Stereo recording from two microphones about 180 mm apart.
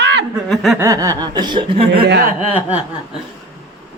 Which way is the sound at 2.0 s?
55° right (ahead or behind).